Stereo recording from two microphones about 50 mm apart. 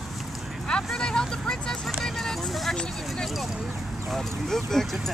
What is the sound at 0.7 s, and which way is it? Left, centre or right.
Speech, centre.